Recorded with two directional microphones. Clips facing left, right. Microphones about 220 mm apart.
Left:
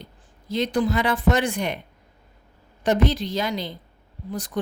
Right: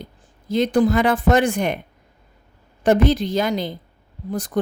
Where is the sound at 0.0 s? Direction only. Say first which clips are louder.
Right 6 dB; 50° right (ahead or behind).